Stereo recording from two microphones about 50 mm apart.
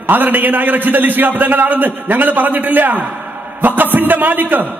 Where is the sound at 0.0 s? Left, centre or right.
Right.